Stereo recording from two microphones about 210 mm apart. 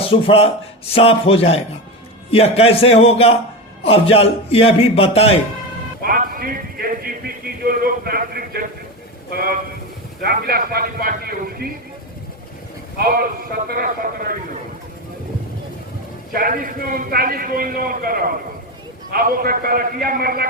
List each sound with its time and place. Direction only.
0.0 s a man's voice: 25° left (ahead or behind)
6.0 s a sound: 45° right (ahead or behind)
10.2 s a man's voice: 45° right (ahead or behind)
13.0 s a man's voice: 45° right (ahead or behind)
16.3 s a man's voice: 40° right (ahead or behind)